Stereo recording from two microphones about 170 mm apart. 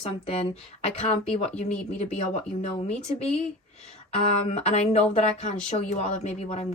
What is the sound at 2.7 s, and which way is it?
Speech, 40° left (ahead or behind).